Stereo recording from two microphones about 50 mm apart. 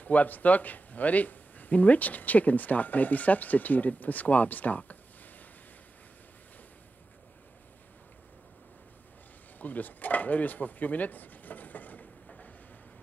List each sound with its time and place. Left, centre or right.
0.0 s speech: left
9.6 s speech: left